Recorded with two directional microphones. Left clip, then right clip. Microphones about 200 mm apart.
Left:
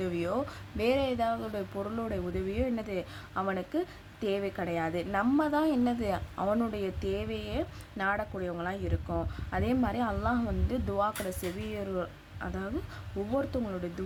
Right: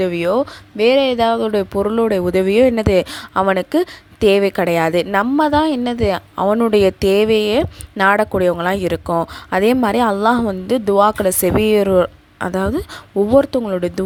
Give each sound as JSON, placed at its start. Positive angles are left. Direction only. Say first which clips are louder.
{"t": 0.0, "sound": "speech", "louder": "right 16 dB", "side_deg": -40}